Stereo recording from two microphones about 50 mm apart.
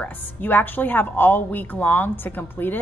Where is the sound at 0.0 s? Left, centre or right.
Left.